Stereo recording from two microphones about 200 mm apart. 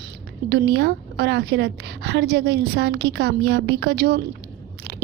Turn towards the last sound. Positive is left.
turn(degrees=-55)  # may be behind; listen again after turning